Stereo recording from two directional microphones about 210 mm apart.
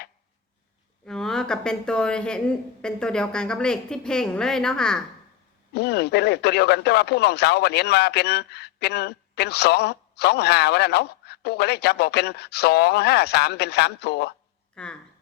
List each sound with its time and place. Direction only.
1.0 s speech: 5° left (ahead or behind)
5.7 s speech: 50° left (ahead or behind)
14.8 s speech: 5° left (ahead or behind)